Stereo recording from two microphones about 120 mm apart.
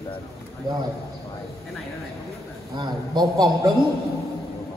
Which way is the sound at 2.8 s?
35° right (ahead or behind).